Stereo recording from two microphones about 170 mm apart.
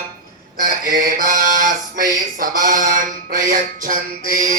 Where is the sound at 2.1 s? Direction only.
50° right (ahead or behind).